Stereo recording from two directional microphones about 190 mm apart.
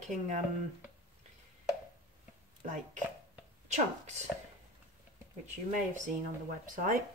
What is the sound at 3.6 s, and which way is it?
Speech, 40° right (ahead or behind).